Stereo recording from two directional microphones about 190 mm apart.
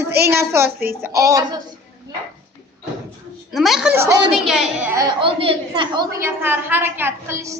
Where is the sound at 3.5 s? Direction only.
Centre (ahead or behind).